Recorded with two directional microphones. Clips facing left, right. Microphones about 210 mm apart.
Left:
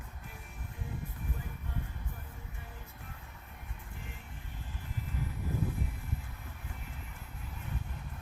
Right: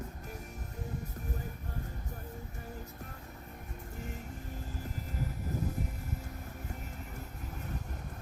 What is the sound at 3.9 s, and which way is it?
Vehicle, 40° right (ahead or behind).